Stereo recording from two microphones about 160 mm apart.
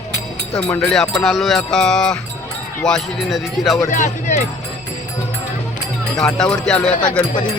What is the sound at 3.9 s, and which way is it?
Speech, 50° left (ahead or behind).